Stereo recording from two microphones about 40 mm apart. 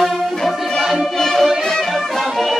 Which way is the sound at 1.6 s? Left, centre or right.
Centre.